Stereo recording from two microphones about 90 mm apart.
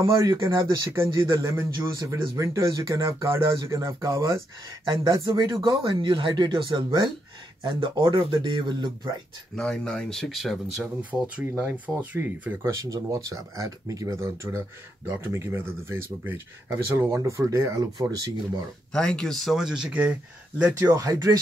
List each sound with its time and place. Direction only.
0.1 s speech: 50° right (ahead or behind)
0.7 s speech: 30° right (ahead or behind)
5.8 s speech: 70° right (ahead or behind)
9.6 s speech: 10° left (ahead or behind); by 12.5 s 15° right (ahead or behind)
12.6 s speech: 35° right (ahead or behind)
17.9 s speech: 45° right (ahead or behind)
18.9 s speech: 5° left (ahead or behind); by 20.9 s 15° right (ahead or behind)
20.9 s speech: 40° right (ahead or behind)